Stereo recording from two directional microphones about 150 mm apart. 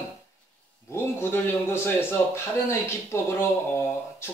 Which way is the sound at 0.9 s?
15° left (ahead or behind).